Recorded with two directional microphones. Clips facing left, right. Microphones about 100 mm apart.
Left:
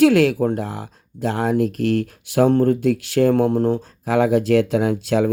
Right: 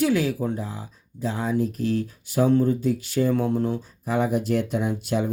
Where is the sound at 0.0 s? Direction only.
80° left.